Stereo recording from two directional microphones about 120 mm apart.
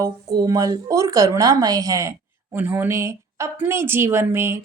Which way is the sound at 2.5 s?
15° right (ahead or behind).